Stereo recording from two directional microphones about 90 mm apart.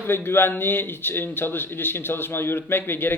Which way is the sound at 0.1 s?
25° left (ahead or behind).